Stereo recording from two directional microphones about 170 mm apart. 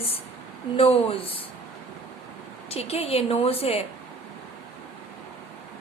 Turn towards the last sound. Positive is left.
turn(degrees=35)  # may be behind; listen again after turning